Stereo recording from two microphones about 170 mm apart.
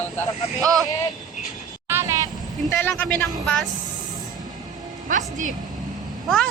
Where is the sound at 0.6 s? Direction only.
20° right (ahead or behind).